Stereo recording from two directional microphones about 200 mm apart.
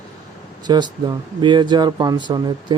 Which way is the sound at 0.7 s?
20° right (ahead or behind).